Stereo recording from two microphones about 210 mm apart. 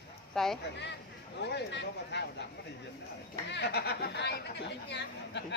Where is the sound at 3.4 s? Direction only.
55° left (ahead or behind).